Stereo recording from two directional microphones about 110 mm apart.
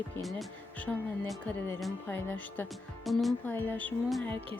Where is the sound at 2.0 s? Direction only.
15° left (ahead or behind).